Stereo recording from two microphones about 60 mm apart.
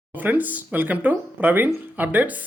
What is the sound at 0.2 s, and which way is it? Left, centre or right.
Speech, right.